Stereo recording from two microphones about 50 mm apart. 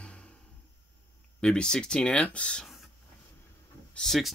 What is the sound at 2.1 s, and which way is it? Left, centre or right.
Speech, left.